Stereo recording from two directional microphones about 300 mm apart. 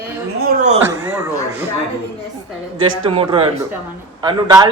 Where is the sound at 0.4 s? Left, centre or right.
Right.